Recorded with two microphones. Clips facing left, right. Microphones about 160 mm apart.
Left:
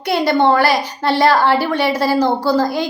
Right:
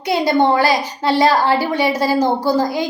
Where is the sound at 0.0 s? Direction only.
15° right (ahead or behind).